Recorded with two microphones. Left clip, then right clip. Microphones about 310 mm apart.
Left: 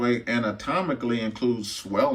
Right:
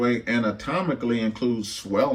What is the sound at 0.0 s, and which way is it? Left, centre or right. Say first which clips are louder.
Speech: right 1 dB; centre.